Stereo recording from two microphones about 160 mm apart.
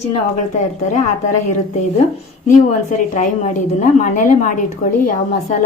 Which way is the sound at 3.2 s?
45° left (ahead or behind).